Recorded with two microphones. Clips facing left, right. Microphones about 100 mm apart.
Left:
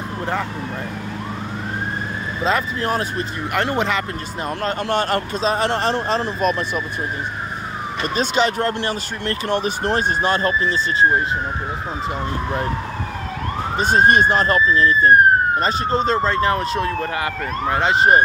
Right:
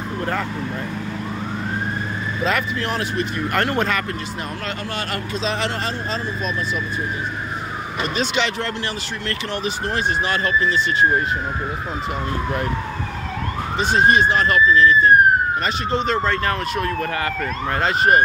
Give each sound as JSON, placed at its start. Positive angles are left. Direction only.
{"t": 2.4, "sound": "speech", "side_deg": 30}
{"t": 3.5, "sound": "speech", "side_deg": 15}
{"t": 4.9, "sound": "speech", "side_deg": 40}
{"t": 8.2, "sound": "speech", "side_deg": 40}
{"t": 9.5, "sound": "speech", "side_deg": 50}
{"t": 13.7, "sound": "speech", "side_deg": 45}
{"t": 14.4, "sound": "speech", "side_deg": 35}